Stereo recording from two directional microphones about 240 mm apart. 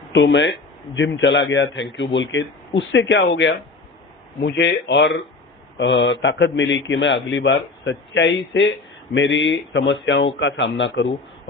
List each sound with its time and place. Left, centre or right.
0.1 s a man's voice: left